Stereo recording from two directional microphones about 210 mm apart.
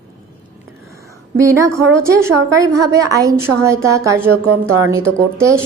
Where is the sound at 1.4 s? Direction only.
15° right (ahead or behind).